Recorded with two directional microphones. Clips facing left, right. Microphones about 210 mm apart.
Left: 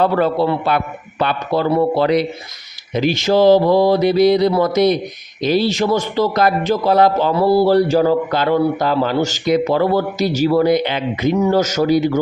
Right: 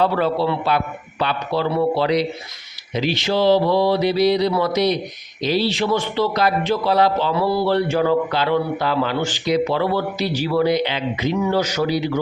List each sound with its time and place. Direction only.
0.0 s a man's voice: 50° left (ahead or behind)